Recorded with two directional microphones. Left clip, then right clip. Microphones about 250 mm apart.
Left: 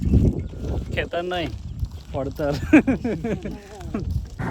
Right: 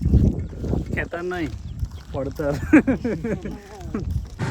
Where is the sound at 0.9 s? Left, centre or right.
Centre.